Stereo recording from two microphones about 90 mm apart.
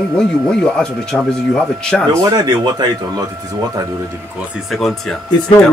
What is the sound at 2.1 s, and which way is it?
Speech, 40° right (ahead or behind).